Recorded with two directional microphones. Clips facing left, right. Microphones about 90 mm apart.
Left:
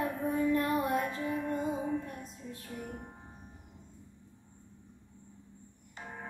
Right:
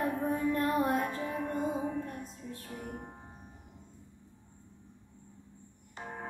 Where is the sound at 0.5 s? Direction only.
40° right (ahead or behind).